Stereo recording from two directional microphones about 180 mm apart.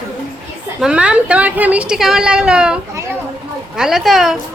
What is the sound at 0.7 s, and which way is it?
A woman's voice, 5° right (ahead or behind).